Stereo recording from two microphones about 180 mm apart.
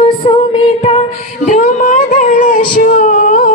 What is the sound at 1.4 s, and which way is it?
Music, 45° left (ahead or behind).